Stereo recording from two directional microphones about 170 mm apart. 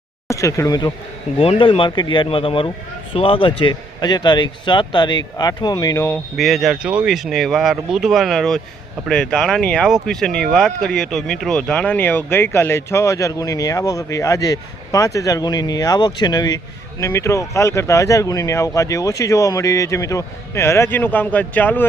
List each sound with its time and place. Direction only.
0.3 s a man's voice: 20° left (ahead or behind)
6.3 s speech: centre (ahead or behind)